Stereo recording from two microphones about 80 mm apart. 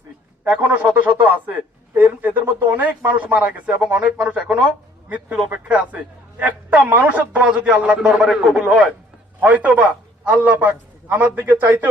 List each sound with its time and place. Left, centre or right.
0.5 s a man's voice: right; by 8.9 s centre
9.4 s a man's voice: centre